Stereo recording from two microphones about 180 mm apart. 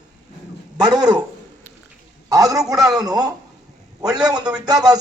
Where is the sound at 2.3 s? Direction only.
20° right (ahead or behind).